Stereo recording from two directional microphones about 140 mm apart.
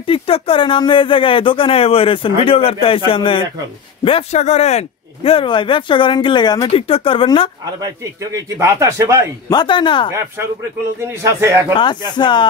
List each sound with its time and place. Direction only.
0.0 s speech: 40° left (ahead or behind)
6.7 s speech: 40° left (ahead or behind)
7.8 s speech: 25° right (ahead or behind)
9.5 s speech: 35° left (ahead or behind)
11.1 s speech: 20° right (ahead or behind)
11.7 s speech: 35° left (ahead or behind)